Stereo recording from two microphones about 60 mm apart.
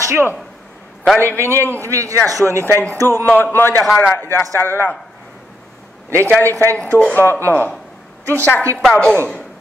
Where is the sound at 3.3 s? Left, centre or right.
Left.